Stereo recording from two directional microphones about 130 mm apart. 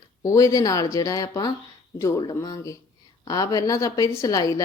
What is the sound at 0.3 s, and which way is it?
A woman's voice, 25° left (ahead or behind).